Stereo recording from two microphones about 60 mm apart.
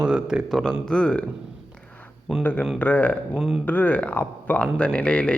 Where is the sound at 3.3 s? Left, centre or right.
Centre.